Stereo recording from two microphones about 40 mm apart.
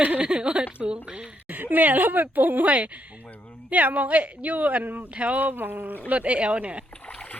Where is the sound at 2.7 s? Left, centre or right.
Right.